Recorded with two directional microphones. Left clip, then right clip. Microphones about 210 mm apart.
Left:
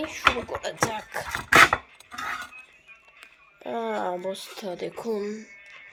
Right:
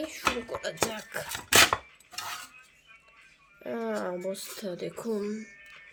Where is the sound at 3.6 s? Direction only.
20° right (ahead or behind).